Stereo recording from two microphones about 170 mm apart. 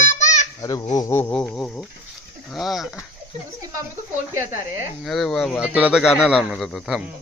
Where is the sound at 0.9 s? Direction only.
15° left (ahead or behind).